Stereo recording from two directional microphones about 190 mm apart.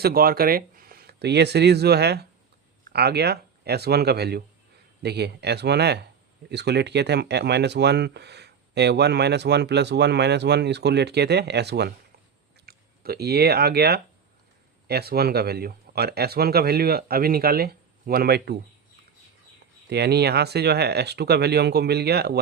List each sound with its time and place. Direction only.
0.0 s speech: 50° right (ahead or behind)
19.9 s speech: 60° right (ahead or behind)